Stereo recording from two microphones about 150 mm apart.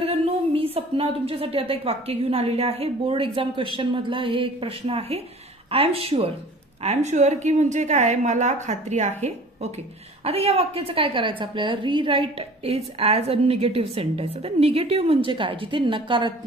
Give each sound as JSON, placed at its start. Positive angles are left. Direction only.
{"t": 0.0, "sound": "a woman's voice", "side_deg": -40}